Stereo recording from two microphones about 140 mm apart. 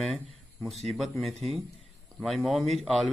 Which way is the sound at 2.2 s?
Centre (ahead or behind).